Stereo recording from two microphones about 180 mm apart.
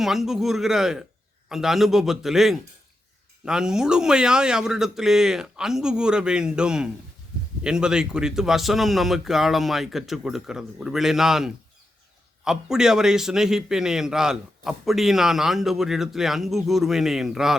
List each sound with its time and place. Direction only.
0.0 s a man's voice: centre (ahead or behind)